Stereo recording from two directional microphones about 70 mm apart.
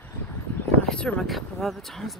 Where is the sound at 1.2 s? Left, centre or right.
Centre.